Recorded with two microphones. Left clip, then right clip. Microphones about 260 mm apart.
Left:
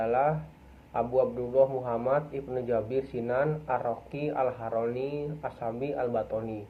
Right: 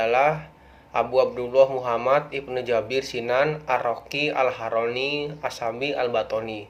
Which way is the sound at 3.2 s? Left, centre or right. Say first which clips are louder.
Right 7 dB; right.